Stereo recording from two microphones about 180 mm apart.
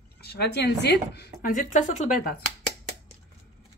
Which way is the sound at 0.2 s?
65° left (ahead or behind).